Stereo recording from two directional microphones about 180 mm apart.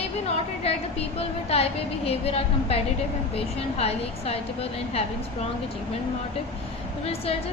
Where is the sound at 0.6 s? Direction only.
35° left (ahead or behind).